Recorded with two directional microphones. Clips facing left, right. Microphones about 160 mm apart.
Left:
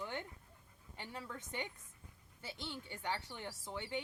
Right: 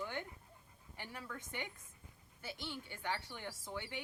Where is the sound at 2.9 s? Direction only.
20° left (ahead or behind).